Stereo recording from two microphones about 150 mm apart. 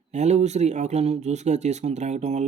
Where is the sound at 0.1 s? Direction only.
50° right (ahead or behind).